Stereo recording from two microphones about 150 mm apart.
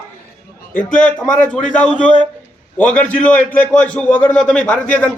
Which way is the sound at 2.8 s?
10° left (ahead or behind).